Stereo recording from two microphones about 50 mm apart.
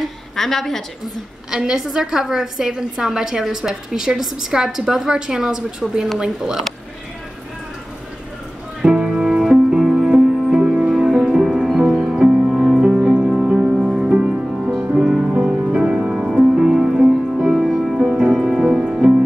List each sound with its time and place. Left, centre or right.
0.4 s a woman's voice: centre
1.5 s a woman's voice: centre
8.8 s music: centre